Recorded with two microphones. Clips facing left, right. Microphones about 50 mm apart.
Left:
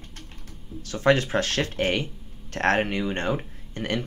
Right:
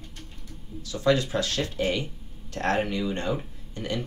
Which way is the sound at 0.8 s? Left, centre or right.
Left.